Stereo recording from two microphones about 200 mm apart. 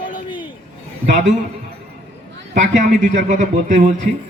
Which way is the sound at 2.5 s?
40° right (ahead or behind).